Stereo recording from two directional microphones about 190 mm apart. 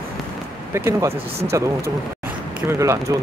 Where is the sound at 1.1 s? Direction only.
30° right (ahead or behind).